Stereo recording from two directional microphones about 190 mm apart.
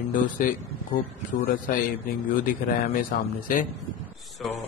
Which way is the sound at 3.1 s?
50° left (ahead or behind).